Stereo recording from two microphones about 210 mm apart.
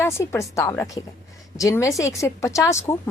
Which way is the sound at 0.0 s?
15° left (ahead or behind).